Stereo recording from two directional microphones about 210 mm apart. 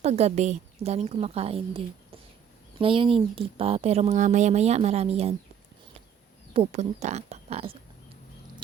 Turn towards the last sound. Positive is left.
turn(degrees=-30)  # may be behind; listen again after turning